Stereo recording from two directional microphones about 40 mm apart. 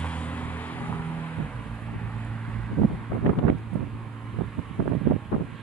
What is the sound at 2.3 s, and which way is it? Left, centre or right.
Vehicle, left.